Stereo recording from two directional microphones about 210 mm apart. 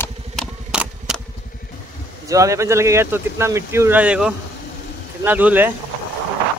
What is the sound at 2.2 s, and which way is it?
Speech, 15° right (ahead or behind).